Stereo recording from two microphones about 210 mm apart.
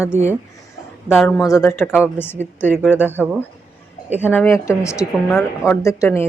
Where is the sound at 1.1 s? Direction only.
Centre (ahead or behind).